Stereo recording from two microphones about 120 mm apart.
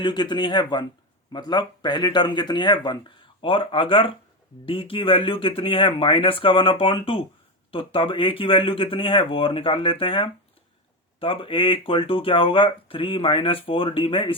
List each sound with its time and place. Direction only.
0.0 s speech: 40° left (ahead or behind)